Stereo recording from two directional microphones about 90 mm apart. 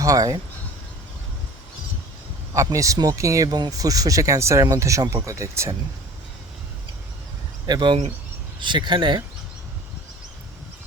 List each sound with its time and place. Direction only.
0.0 s speech: 40° right (ahead or behind)
2.6 s speech: 40° right (ahead or behind)
3.5 s speech: 45° right (ahead or behind)
7.7 s speech: 65° right (ahead or behind)